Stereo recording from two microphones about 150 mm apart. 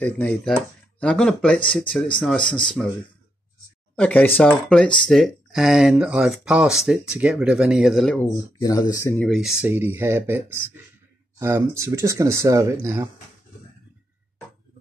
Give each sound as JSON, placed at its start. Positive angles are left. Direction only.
{"t": 0.9, "sound": "speech", "side_deg": 5}
{"t": 3.9, "sound": "speech", "side_deg": 10}
{"t": 8.2, "sound": "speech", "side_deg": 25}
{"t": 9.1, "sound": "speech", "side_deg": 0}